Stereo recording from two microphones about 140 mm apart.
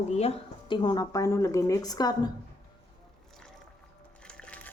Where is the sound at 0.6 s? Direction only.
35° left (ahead or behind).